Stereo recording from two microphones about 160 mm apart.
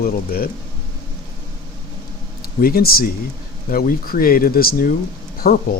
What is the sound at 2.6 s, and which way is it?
Speech, 70° left (ahead or behind).